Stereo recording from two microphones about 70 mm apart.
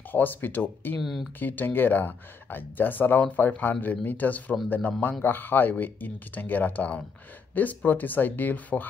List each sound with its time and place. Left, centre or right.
0.1 s speech: left
1.0 s speech: centre
1.4 s speech: left